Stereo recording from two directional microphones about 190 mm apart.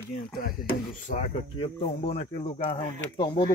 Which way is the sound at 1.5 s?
30° left (ahead or behind).